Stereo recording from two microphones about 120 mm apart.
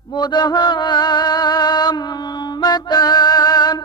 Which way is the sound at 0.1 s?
35° left (ahead or behind).